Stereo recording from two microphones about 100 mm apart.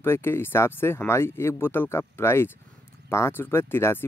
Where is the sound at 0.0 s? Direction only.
25° left (ahead or behind).